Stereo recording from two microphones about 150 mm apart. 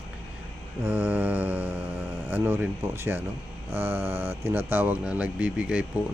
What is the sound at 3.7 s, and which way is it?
Speech, 15° right (ahead or behind).